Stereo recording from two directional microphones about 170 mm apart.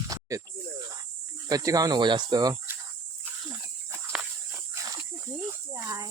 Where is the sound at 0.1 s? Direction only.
20° right (ahead or behind).